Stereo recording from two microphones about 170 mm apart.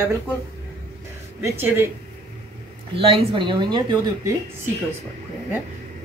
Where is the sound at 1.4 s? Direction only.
15° right (ahead or behind).